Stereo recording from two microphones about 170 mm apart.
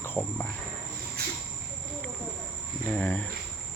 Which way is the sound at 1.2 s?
65° right (ahead or behind).